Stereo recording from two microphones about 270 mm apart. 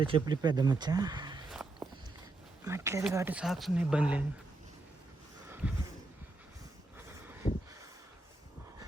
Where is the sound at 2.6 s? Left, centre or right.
Centre.